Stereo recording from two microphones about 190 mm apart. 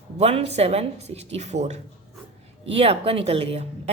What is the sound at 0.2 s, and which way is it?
A woman's voice, 35° right (ahead or behind).